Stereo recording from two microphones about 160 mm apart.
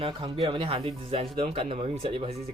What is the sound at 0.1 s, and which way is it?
Speech, 30° right (ahead or behind).